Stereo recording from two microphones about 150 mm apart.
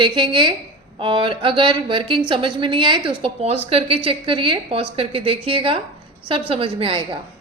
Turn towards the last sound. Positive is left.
turn(degrees=-35)  # may be behind; listen again after turning